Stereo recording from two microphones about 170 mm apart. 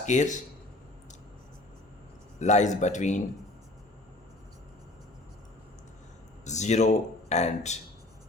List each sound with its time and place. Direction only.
0.0 s speech: 45° left (ahead or behind)
2.4 s speech: 45° left (ahead or behind)
6.4 s speech: 45° left (ahead or behind)